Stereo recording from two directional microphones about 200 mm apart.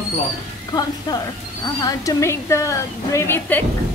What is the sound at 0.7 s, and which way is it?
A woman's voice, 20° left (ahead or behind).